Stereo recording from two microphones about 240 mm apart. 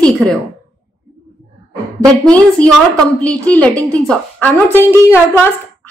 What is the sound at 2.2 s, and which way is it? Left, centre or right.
A woman's voice, centre.